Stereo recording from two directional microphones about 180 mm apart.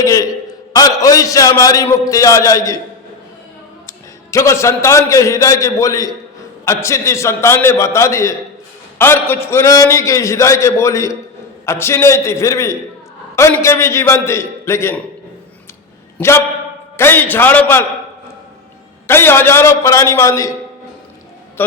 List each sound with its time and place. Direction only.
0.0 s a sound: 20° left (ahead or behind)
0.7 s a man's voice: 20° left (ahead or behind)
3.8 s a man's voice: 15° left (ahead or behind)
16.1 s a man's voice: 15° left (ahead or behind)
19.0 s a man's voice: 15° left (ahead or behind)